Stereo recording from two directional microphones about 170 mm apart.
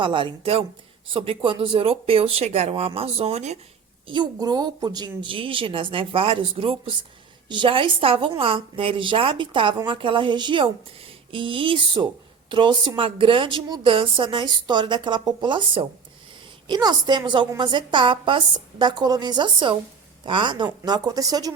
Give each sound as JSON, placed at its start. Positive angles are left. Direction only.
{"t": 0.0, "sound": "speech", "side_deg": -30}
{"t": 4.0, "sound": "speech", "side_deg": -25}